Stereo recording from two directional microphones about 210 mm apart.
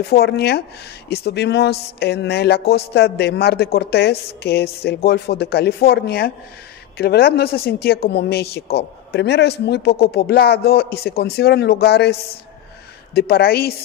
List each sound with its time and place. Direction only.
0.1 s a woman's voice: 50° left (ahead or behind)